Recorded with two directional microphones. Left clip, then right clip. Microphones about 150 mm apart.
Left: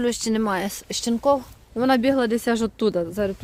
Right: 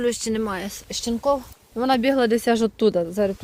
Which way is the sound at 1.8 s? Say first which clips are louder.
Left 1 dB; 35° left (ahead or behind).